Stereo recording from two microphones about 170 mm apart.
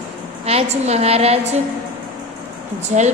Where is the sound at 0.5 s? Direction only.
40° right (ahead or behind).